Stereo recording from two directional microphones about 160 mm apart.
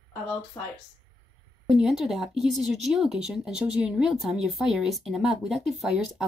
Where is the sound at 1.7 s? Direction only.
5° right (ahead or behind).